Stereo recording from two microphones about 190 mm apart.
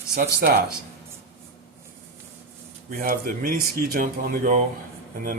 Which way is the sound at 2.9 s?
50° right (ahead or behind).